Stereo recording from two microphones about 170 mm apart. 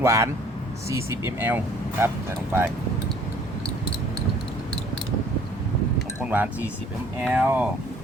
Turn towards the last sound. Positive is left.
turn(degrees=-10)  # may be behind; listen again after turning